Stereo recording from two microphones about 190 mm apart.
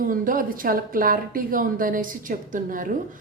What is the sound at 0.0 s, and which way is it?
A woman's voice, 45° right (ahead or behind).